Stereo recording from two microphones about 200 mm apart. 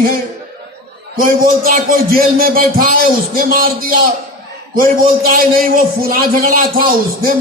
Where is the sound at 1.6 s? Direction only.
45° right (ahead or behind).